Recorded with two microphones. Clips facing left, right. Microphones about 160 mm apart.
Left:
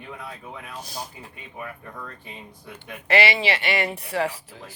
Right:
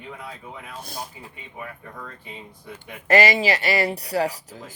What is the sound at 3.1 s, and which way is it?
Speech, 40° right (ahead or behind).